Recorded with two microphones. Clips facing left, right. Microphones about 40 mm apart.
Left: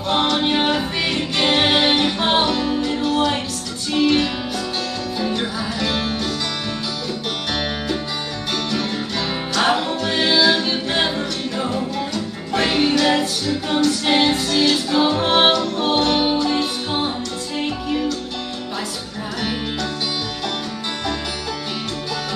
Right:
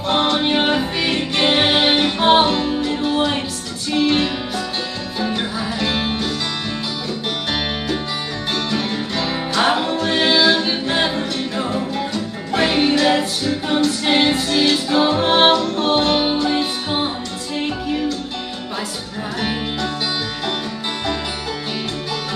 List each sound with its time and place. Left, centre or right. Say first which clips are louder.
0.0 s music: right 1 dB; centre
5.8 s music: right 1 dB; centre
8.7 s music: right 1 dB; centre
10.6 s a capella: right 1 dB; centre
12.5 s music: right 1 dB; centre